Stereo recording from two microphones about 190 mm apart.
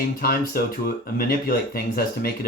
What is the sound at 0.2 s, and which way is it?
Speech, 50° left (ahead or behind).